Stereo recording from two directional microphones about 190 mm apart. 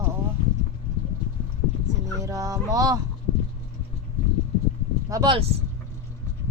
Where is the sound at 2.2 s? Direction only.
15° right (ahead or behind).